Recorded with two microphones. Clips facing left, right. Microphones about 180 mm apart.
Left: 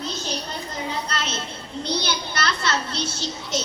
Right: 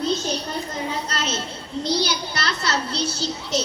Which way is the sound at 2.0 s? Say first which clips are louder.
Right 2 dB; 35° right (ahead or behind).